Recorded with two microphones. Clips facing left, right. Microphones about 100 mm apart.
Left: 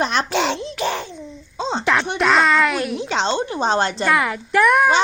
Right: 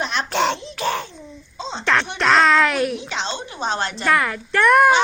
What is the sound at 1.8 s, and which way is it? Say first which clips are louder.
Music: right 1 dB; 10° left (ahead or behind).